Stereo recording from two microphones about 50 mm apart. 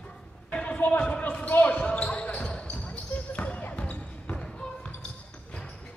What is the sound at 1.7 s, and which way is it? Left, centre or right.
Speech, left.